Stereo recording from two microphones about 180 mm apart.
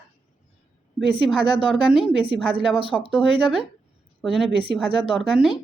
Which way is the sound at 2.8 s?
30° right (ahead or behind).